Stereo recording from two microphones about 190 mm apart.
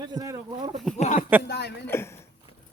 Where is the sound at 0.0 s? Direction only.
20° right (ahead or behind).